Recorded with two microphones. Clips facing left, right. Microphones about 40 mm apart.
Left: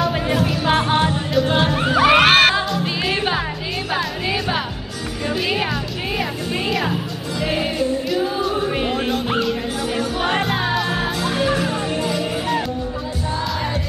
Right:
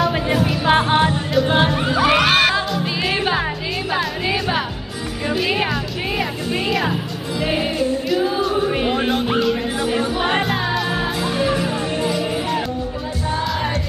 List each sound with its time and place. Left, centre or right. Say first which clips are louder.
0.0 s music: right 1 dB; centre
1.7 s crowd: left 1 dB; centre
2.0 s crowd: left 3 dB; centre
2.7 s music: even; centre
8.1 s music: right 2 dB; centre
8.9 s music: right 2 dB; centre
9.2 s music: right 2 dB; centre
9.9 s music: even; centre
10.4 s music: even; centre